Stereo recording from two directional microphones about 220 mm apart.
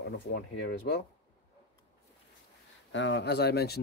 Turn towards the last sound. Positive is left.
turn(degrees=45)  # may be behind; listen again after turning